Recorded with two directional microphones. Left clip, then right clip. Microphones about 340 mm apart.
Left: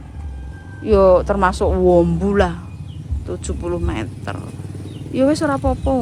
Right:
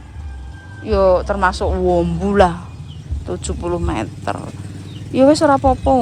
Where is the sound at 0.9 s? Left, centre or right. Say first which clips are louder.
Left 2 dB; centre.